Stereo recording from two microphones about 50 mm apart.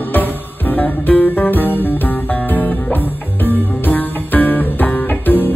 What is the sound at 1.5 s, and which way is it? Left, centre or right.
Music, left.